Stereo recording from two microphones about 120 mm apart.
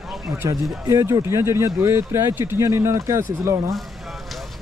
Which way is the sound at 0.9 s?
25° right (ahead or behind).